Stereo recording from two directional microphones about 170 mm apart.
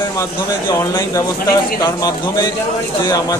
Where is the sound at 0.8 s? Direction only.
20° left (ahead or behind).